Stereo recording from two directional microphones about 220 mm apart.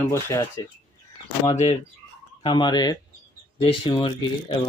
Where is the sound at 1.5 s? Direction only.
30° left (ahead or behind).